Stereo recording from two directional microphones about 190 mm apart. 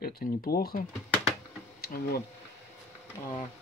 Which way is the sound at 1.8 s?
55° left (ahead or behind).